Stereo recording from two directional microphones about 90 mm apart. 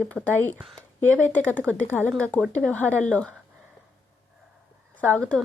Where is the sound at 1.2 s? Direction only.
20° left (ahead or behind).